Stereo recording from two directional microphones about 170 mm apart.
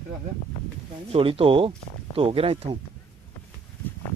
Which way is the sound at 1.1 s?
35° right (ahead or behind).